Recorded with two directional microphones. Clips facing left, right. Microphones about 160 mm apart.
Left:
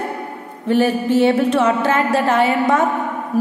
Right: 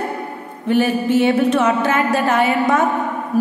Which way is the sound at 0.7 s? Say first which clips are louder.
Even; 35° left (ahead or behind).